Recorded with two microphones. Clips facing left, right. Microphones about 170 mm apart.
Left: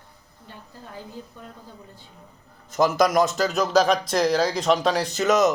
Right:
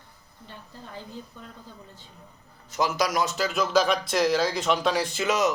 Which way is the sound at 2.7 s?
50° left (ahead or behind).